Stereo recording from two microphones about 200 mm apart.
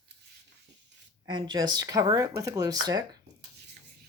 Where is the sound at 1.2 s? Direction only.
20° right (ahead or behind).